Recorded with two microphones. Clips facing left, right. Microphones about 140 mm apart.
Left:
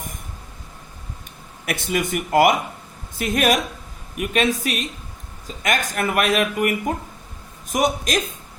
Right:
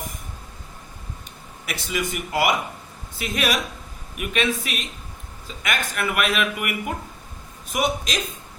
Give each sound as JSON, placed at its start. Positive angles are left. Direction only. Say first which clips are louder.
{"t": 1.6, "sound": "speech", "louder": "left 4 dB", "side_deg": 50}